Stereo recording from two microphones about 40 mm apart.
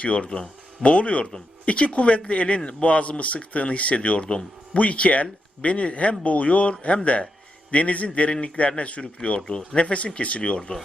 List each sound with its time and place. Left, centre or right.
0.0 s speech: left